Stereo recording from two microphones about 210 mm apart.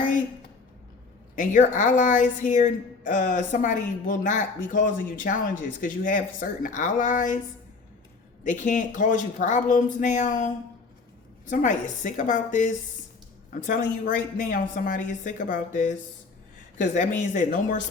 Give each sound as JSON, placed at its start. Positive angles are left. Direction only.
{"t": 1.4, "sound": "a woman's voice", "side_deg": 35}
{"t": 8.4, "sound": "a woman's voice", "side_deg": 35}